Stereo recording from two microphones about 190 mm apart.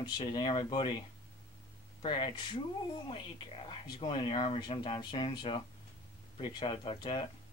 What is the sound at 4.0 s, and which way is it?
Speech, 25° left (ahead or behind).